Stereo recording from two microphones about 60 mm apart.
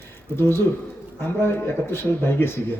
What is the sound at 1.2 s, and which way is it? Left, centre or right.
A man's voice, left.